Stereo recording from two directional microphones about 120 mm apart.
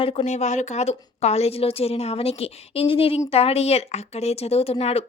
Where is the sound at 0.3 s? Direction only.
75° left (ahead or behind).